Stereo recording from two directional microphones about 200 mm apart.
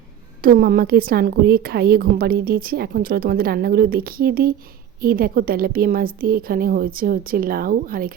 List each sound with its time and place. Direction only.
0.4 s a woman's voice: 45° right (ahead or behind)